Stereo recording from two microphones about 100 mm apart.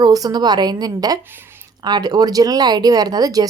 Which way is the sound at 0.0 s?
40° right (ahead or behind).